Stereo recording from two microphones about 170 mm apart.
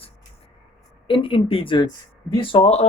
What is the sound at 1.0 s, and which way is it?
Speech, 30° left (ahead or behind).